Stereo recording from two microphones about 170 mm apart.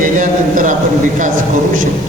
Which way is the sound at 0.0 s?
50° right (ahead or behind).